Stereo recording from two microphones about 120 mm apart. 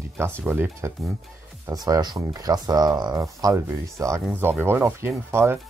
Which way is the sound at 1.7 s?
30° right (ahead or behind).